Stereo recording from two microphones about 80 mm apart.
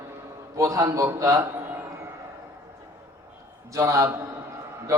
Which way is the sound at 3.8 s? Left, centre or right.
Right.